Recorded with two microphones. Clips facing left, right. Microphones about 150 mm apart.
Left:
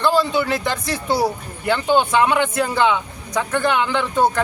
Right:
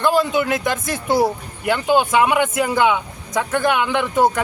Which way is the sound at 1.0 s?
10° right (ahead or behind).